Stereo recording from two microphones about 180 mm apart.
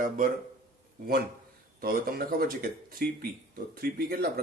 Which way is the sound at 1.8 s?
55° right (ahead or behind).